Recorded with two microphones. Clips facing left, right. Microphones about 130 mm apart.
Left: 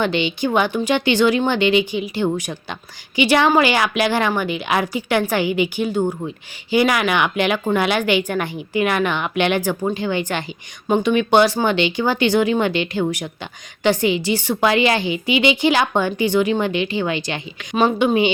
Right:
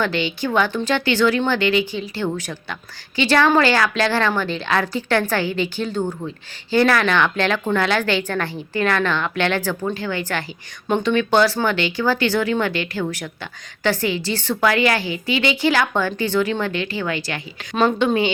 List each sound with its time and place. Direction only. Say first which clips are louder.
0.0 s speech: left 2 dB; 20° left (ahead or behind)